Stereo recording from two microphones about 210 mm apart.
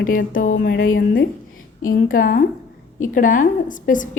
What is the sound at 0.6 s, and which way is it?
A woman's voice, 55° left (ahead or behind).